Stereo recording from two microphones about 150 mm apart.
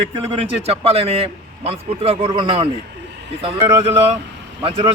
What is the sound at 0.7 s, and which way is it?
A man's voice, 40° right (ahead or behind).